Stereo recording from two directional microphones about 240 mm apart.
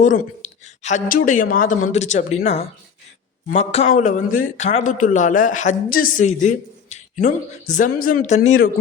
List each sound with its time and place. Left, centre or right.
0.0 s a man's voice: left